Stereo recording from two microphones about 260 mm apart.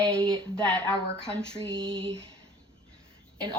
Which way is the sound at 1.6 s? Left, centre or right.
Centre.